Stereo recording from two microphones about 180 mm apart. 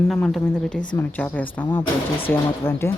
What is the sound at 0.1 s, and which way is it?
A woman's voice, 5° left (ahead or behind).